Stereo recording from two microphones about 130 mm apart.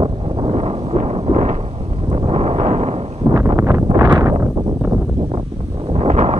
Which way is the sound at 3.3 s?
25° right (ahead or behind).